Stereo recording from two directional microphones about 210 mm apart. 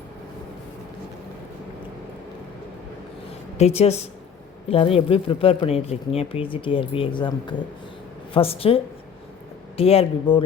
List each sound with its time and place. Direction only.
3.6 s speech: 30° left (ahead or behind)